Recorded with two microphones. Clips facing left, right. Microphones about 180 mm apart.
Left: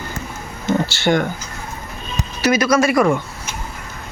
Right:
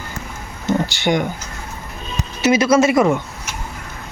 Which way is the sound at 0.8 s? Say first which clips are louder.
Left 1 dB; 15° right (ahead or behind).